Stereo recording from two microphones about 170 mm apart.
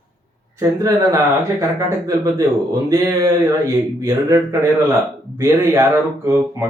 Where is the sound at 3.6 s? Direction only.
20° right (ahead or behind).